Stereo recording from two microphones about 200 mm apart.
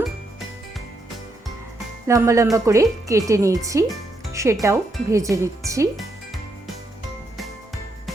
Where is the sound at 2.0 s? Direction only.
15° right (ahead or behind).